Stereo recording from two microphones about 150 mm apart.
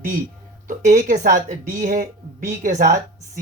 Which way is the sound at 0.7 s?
65° right (ahead or behind).